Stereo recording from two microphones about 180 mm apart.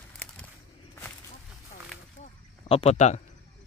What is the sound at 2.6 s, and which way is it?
Speech, 35° left (ahead or behind).